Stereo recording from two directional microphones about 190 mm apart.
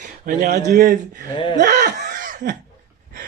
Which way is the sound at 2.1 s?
45° right (ahead or behind).